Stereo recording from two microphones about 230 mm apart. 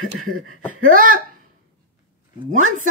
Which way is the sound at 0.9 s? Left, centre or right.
Right.